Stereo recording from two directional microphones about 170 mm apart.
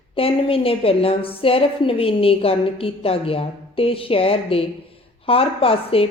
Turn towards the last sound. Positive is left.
turn(degrees=35)  # may be behind; listen again after turning